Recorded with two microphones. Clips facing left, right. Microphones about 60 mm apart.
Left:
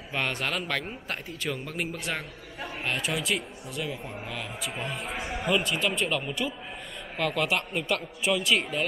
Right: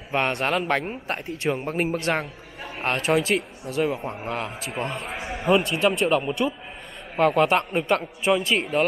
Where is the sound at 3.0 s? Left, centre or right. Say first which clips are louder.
Right 10 dB; right.